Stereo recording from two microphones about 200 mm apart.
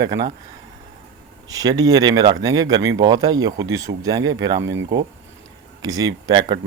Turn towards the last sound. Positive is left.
turn(degrees=-20)  # may be behind; listen again after turning